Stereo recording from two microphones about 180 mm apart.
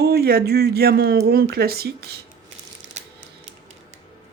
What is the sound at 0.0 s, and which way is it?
Speech, 60° right (ahead or behind).